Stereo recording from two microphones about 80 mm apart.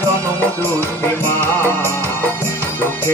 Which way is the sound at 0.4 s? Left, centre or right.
Left.